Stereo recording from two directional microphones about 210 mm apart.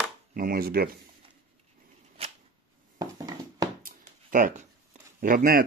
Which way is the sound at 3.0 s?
20° right (ahead or behind).